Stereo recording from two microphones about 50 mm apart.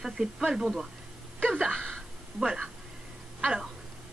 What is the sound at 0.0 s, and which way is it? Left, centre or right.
Speech, centre.